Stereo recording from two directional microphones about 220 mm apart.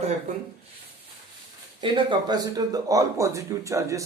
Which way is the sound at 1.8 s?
20° right (ahead or behind).